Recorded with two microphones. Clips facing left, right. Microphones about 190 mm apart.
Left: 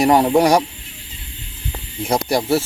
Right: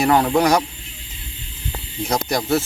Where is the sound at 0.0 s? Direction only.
15° left (ahead or behind).